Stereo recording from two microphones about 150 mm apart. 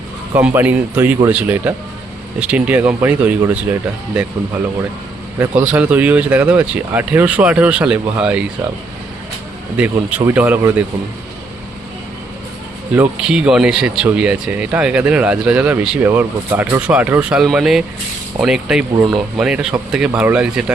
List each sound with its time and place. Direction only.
0.3 s speech: 10° right (ahead or behind)
5.4 s speech: 10° right (ahead or behind)
9.7 s speech: 10° right (ahead or behind)
12.9 s speech: 10° right (ahead or behind)
18.9 s speech: 30° right (ahead or behind)
19.4 s speech: 5° right (ahead or behind)